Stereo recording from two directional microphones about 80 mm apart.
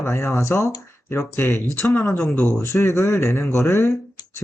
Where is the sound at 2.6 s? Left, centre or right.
Left.